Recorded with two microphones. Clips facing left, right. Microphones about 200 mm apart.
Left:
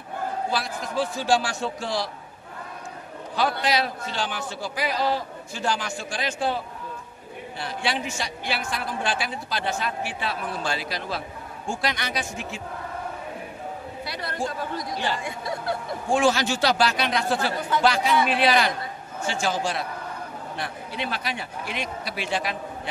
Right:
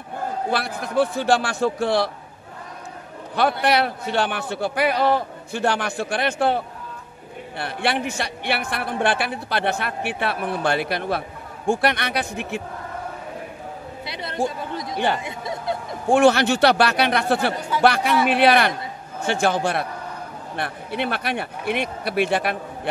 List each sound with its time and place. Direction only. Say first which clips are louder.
0.5 s a man's voice: right 3 dB; 60° right (ahead or behind)
3.6 s a man's voice: right 5 dB; 60° right (ahead or behind)
14.0 s speech: right 5 dB; 20° right (ahead or behind)
16.1 s a man's voice: right 6 dB; 60° right (ahead or behind)